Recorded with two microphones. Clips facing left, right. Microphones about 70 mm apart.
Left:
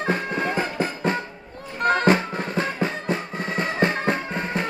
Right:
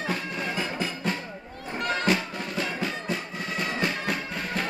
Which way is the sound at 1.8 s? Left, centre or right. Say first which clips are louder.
Left 7 dB; left.